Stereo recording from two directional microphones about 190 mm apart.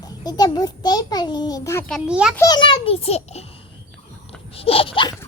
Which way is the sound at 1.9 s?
5° right (ahead or behind).